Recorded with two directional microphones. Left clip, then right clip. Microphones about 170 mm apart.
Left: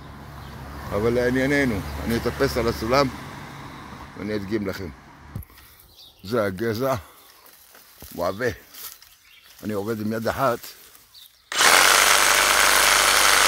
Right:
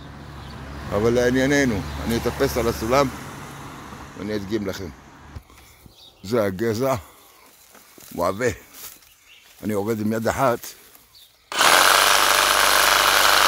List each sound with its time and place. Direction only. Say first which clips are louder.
0.9 s speech: right 2 dB; 10° right (ahead or behind)
3.4 s vehicle: right 1 dB; 45° left (ahead or behind)
4.2 s speech: right 1 dB; 10° left (ahead or behind)
6.2 s speech: right 2 dB; 15° right (ahead or behind)
8.2 s speech: right 3 dB; 25° right (ahead or behind)
11.5 s tools: right 1 dB; 10° right (ahead or behind)